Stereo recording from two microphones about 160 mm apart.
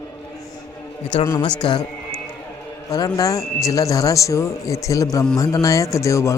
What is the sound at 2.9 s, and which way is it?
Speech, 25° left (ahead or behind).